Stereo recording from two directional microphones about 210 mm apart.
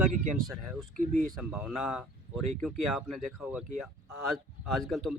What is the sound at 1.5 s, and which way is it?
Speech, 5° right (ahead or behind).